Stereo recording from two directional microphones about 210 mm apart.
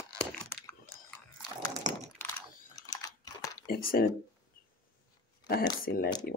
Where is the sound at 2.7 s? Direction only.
15° left (ahead or behind).